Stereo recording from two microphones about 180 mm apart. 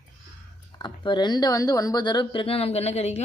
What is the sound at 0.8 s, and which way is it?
A woman's voice, 25° left (ahead or behind).